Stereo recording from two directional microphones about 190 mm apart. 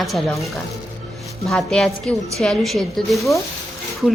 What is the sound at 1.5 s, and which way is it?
A woman's voice, 5° left (ahead or behind).